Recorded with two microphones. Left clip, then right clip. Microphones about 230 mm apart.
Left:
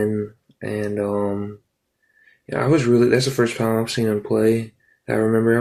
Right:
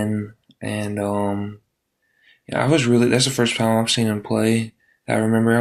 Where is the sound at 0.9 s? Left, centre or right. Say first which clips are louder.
Even; right.